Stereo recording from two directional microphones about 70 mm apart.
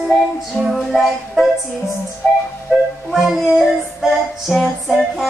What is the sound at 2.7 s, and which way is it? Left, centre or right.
Music, centre.